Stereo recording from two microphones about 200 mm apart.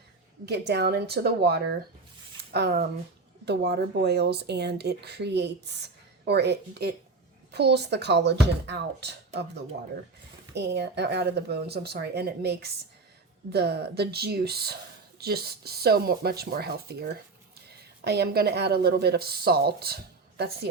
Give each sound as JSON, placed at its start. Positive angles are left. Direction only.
{"t": 0.4, "sound": "speech", "side_deg": -55}
{"t": 10.5, "sound": "speech", "side_deg": -55}